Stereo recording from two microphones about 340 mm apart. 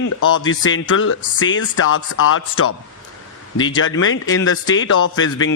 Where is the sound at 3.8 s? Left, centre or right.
Left.